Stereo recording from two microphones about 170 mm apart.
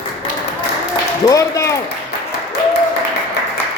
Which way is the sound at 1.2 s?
20° left (ahead or behind).